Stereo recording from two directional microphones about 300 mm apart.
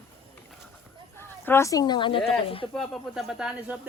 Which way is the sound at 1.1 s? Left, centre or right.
Centre.